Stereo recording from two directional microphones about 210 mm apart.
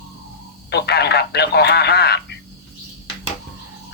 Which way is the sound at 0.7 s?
50° left (ahead or behind).